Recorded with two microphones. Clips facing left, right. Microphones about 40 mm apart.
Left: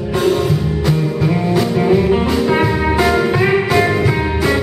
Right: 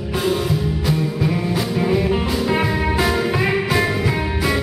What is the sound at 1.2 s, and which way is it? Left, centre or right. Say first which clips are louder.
Music: left 5 dB; centre.